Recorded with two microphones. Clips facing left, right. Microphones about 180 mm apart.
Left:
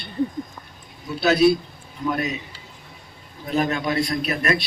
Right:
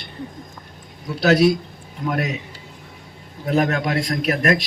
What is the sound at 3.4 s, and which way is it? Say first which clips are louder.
A man's voice: right 3 dB; 75° right (ahead or behind).